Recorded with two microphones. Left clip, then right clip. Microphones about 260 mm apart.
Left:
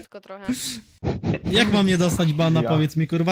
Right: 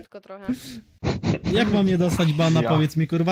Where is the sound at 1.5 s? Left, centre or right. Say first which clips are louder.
Left 3 dB; left.